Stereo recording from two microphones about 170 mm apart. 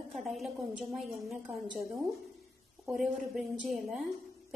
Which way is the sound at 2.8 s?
Centre (ahead or behind).